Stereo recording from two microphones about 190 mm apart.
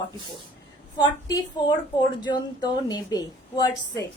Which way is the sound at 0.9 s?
20° left (ahead or behind).